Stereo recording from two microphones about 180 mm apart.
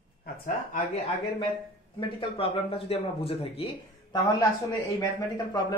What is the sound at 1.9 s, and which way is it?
Speech, 30° left (ahead or behind).